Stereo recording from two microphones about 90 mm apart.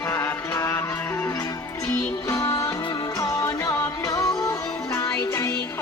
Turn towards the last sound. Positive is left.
turn(degrees=30)  # may be behind; listen again after turning